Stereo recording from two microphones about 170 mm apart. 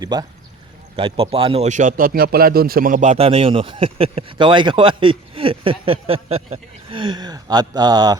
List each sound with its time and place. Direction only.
0.0 s speech: 20° right (ahead or behind)